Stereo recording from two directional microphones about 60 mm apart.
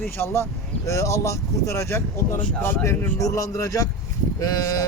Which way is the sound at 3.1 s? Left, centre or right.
Left.